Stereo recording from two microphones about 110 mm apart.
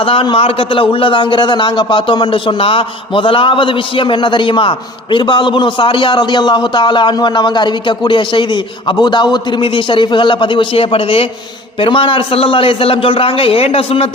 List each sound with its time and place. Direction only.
0.0 s a man's voice: 55° left (ahead or behind)